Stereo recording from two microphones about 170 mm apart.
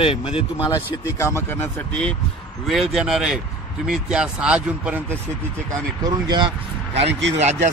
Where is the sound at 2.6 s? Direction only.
Centre (ahead or behind).